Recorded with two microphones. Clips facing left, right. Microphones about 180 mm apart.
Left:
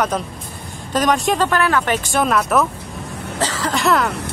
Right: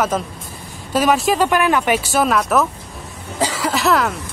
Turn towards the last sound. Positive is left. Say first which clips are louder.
# right 1 dB
turn(degrees=0)  # may be behind; listen again after turning